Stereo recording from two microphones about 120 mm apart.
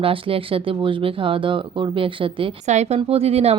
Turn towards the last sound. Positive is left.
turn(degrees=-60)  # may be behind; listen again after turning